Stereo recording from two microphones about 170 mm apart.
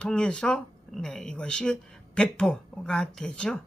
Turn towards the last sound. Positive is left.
turn(degrees=5)  # may be behind; listen again after turning